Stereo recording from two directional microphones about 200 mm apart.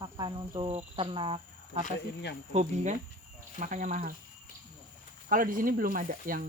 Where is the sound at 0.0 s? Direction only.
20° right (ahead or behind).